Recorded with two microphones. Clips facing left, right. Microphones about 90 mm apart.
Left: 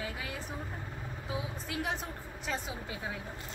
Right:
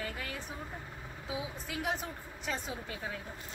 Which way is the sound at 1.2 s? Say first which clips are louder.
Even; centre (ahead or behind).